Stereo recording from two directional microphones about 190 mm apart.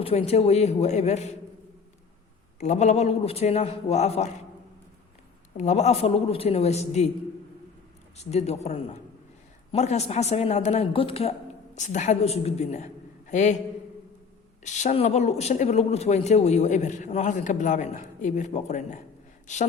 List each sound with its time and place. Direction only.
0.0 s a man's voice: 30° left (ahead or behind)
2.6 s a man's voice: 35° left (ahead or behind)
5.5 s a man's voice: 35° left (ahead or behind)
8.1 s a man's voice: 35° left (ahead or behind)
14.6 s a man's voice: 40° left (ahead or behind)